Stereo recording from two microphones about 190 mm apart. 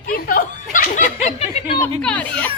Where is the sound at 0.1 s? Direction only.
50° left (ahead or behind).